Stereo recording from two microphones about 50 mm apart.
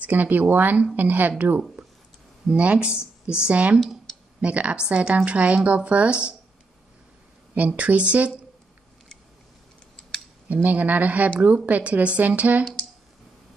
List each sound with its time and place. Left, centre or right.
0.0 s speech: right
2.4 s speech: right
7.5 s speech: right
10.5 s speech: right